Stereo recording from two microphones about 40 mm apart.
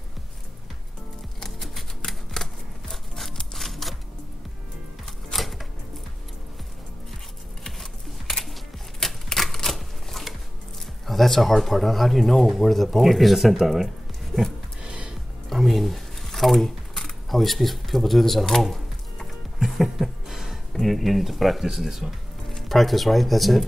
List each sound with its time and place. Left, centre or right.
1.4 s music: centre
2.0 s scissors: centre
5.3 s typewriter: centre
7.8 s typing: centre
9.0 s typewriter: centre
11.1 s speech: centre
14.8 s music: right
15.5 s a sound: centre
18.5 s speech: centre
19.6 s a sound: centre
20.7 s speech: centre